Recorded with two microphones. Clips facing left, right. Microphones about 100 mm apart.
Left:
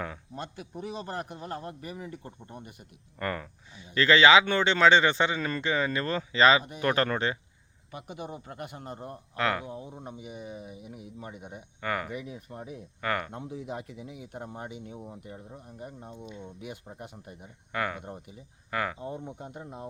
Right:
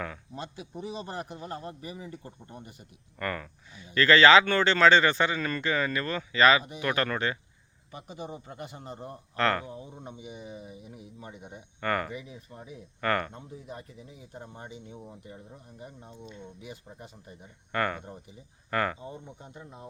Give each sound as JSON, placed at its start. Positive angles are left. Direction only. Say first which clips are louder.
{"t": 0.6, "sound": "speech", "louder": "even", "side_deg": 0}
{"t": 3.2, "sound": "speech", "louder": "left 1 dB", "side_deg": 25}
{"t": 6.7, "sound": "speech", "louder": "left 2 dB", "side_deg": 35}
{"t": 8.2, "sound": "speech", "louder": "right 1 dB", "side_deg": 0}
{"t": 12.1, "sound": "speech", "louder": "left 3 dB", "side_deg": 60}
{"t": 13.0, "sound": "speech", "louder": "right 3 dB", "side_deg": 10}
{"t": 13.5, "sound": "speech", "louder": "left 5 dB", "side_deg": 90}
{"t": 14.8, "sound": "speech", "louder": "left 3 dB", "side_deg": 5}
{"t": 16.1, "sound": "speech", "louder": "left 2 dB", "side_deg": 10}
{"t": 19.4, "sound": "speech", "louder": "left 5 dB", "side_deg": 55}